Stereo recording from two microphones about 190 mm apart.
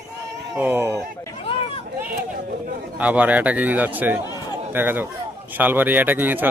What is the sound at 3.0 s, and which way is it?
A man's voice, 10° right (ahead or behind).